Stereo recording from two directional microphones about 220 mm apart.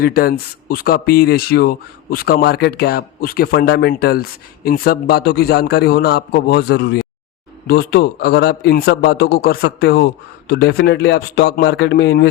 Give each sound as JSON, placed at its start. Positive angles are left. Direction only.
{"t": 0.0, "sound": "speech", "side_deg": 45}